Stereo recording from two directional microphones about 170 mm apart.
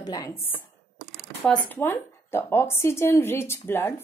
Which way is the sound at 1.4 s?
10° left (ahead or behind).